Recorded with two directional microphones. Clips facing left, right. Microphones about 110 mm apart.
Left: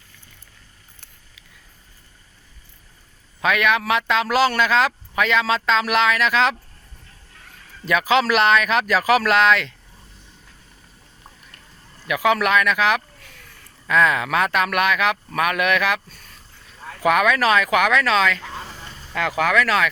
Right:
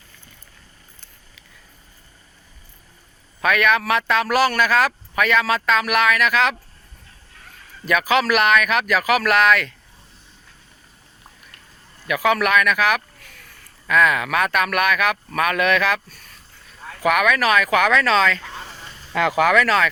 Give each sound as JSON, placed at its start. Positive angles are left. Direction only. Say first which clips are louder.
{"t": 3.4, "sound": "a man's voice", "louder": "right 1 dB", "side_deg": 20}
{"t": 7.9, "sound": "a man's voice", "louder": "even", "side_deg": 25}
{"t": 12.0, "sound": "a man's voice", "louder": "even", "side_deg": 20}
{"t": 17.0, "sound": "speech", "louder": "left 1 dB", "side_deg": 25}
{"t": 19.4, "sound": "speech", "louder": "right 2 dB", "side_deg": -5}
{"t": 19.6, "sound": "speech", "louder": "right 1 dB", "side_deg": 5}